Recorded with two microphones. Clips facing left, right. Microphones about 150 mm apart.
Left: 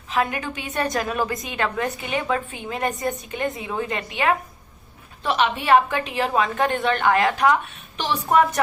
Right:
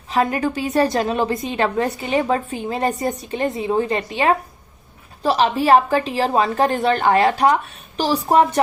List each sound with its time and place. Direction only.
0.1 s a woman's voice: 35° right (ahead or behind)